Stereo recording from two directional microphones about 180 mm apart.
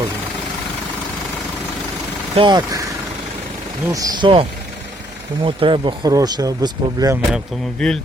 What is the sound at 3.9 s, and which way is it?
Speech, 20° right (ahead or behind).